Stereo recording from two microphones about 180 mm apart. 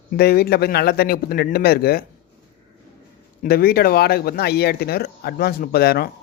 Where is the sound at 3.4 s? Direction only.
55° left (ahead or behind).